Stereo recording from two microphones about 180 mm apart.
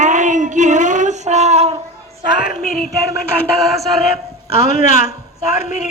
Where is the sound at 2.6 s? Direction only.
50° left (ahead or behind).